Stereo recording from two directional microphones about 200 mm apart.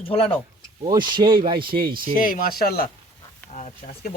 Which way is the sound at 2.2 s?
45° left (ahead or behind).